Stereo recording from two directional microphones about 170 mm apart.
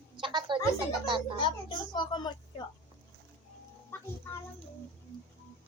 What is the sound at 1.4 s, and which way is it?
Speech, 30° left (ahead or behind).